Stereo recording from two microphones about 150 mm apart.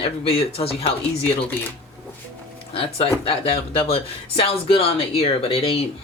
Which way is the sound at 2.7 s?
35° left (ahead or behind).